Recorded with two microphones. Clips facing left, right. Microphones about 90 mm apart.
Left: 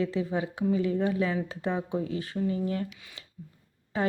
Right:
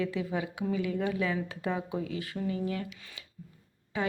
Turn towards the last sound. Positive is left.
turn(degrees=35)  # may be behind; listen again after turning